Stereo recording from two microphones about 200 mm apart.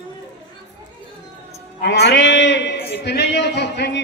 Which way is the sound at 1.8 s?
60° left (ahead or behind).